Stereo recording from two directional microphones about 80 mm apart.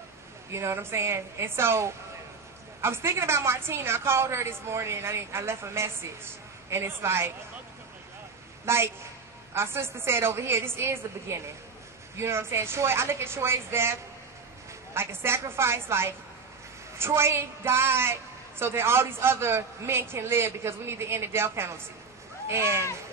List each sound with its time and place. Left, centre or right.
0.5 s a woman's voice: right
8.6 s a woman's voice: right
15.0 s a woman's voice: right